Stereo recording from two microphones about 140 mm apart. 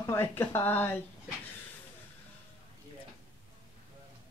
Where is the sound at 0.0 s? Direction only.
20° left (ahead or behind).